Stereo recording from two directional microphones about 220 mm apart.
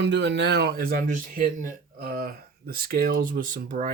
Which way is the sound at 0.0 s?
55° right (ahead or behind).